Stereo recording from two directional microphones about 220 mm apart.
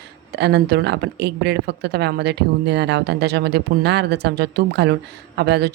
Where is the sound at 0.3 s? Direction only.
50° right (ahead or behind).